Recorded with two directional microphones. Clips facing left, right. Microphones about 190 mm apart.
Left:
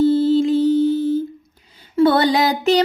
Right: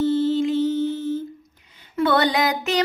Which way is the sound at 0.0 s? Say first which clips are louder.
Left 5 dB; 35° left (ahead or behind).